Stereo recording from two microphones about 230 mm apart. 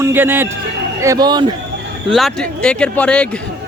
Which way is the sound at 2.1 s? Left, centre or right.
Centre.